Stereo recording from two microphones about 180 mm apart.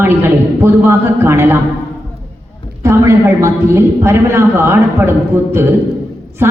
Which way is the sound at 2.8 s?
15° right (ahead or behind).